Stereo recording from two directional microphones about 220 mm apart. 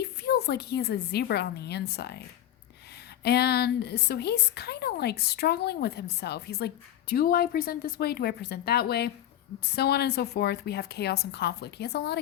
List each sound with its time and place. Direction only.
0.0 s a woman's voice: 45° left (ahead or behind)
3.2 s a woman's voice: 45° left (ahead or behind)